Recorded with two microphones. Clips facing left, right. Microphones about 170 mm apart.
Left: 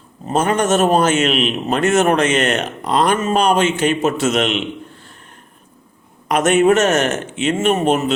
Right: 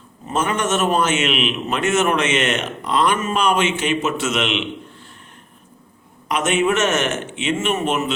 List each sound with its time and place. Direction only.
0.3 s a man's voice: 40° left (ahead or behind)
6.2 s a man's voice: 45° left (ahead or behind)